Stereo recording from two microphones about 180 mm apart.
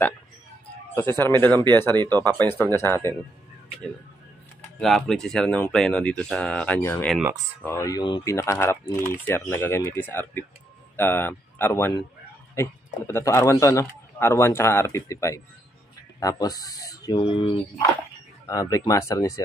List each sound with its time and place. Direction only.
0.9 s a man's voice: 10° left (ahead or behind)
4.7 s a man's voice: centre (ahead or behind); by 19.4 s 20° left (ahead or behind)